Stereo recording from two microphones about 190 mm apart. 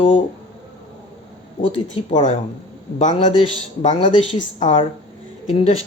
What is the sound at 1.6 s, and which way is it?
Speech, 35° left (ahead or behind).